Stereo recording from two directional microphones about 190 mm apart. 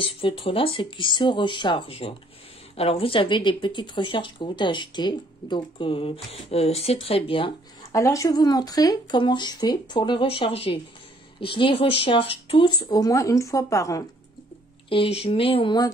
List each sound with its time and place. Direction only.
0.0 s a woman's voice: 25° left (ahead or behind)
7.9 s a woman's voice: 15° left (ahead or behind)
14.9 s a woman's voice: 30° left (ahead or behind)